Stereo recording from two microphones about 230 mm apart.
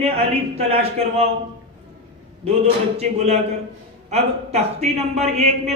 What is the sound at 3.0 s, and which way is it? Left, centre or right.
Speech, right.